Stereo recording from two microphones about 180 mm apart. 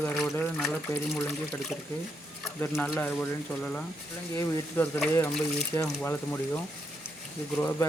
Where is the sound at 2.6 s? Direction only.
10° left (ahead or behind).